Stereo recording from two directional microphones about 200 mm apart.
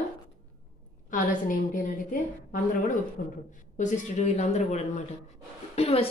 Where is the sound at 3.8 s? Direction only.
35° left (ahead or behind).